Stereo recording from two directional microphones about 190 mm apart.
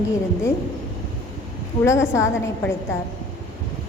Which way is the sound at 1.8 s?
15° left (ahead or behind).